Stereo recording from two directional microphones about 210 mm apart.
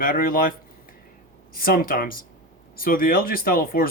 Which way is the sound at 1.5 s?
45° left (ahead or behind).